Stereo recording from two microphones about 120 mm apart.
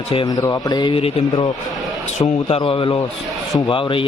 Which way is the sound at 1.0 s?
55° left (ahead or behind).